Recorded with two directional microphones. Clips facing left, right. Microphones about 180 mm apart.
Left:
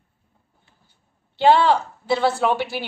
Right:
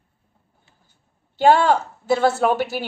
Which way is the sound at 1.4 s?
45° right (ahead or behind).